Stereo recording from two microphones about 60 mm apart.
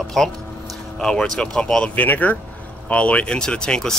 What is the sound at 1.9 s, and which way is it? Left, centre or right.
Speech, left.